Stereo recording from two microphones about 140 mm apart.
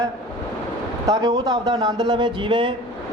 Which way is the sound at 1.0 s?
30° right (ahead or behind).